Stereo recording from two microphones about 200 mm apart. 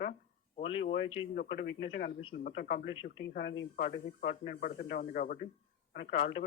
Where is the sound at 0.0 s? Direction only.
45° left (ahead or behind).